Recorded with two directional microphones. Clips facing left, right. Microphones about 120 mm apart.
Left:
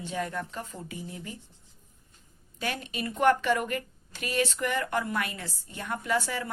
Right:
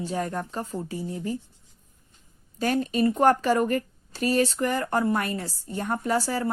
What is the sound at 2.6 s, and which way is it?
A woman's voice, 40° right (ahead or behind).